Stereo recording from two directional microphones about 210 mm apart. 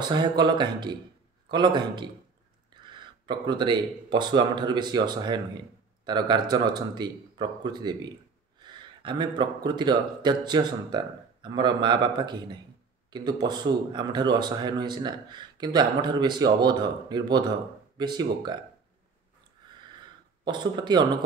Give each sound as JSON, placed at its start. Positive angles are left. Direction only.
{"t": 0.1, "sound": "speech", "side_deg": -20}
{"t": 20.4, "sound": "speech", "side_deg": -20}